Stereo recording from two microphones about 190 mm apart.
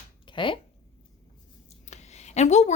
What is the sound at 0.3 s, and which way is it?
Speech, 25° left (ahead or behind).